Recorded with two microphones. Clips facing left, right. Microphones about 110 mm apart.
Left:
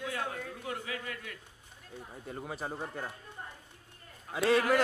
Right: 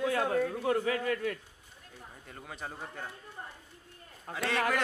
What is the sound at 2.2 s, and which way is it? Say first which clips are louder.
Speech: left 4 dB; 20° left (ahead or behind).